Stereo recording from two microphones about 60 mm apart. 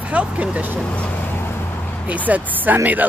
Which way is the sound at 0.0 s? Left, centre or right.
Centre.